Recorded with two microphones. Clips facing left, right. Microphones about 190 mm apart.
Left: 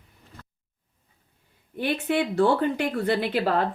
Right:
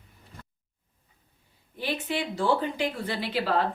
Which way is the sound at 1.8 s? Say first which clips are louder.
Left 6 dB; 60° left (ahead or behind).